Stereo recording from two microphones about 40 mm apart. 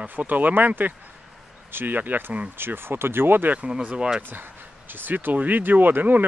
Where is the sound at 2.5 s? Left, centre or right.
Right.